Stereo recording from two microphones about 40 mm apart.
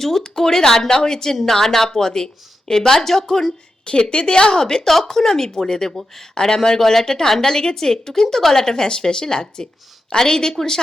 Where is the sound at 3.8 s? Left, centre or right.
Left.